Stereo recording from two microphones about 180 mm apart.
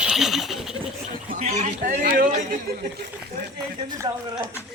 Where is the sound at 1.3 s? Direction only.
45° right (ahead or behind).